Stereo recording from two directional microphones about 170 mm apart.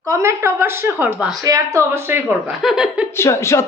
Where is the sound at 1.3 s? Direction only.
20° right (ahead or behind); by 3.0 s 5° right (ahead or behind).